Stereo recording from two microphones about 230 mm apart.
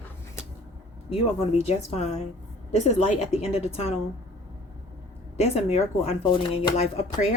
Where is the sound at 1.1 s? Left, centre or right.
Left.